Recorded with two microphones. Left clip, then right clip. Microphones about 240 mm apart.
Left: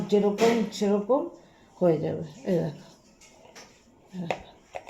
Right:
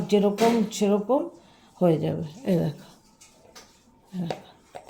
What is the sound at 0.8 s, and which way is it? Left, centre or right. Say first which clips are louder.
Speech: right 1 dB; right.